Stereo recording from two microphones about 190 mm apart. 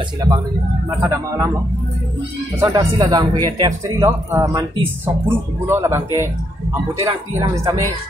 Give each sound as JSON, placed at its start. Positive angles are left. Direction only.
{"t": 0.8, "sound": "speech", "side_deg": -20}
{"t": 2.7, "sound": "speech", "side_deg": -20}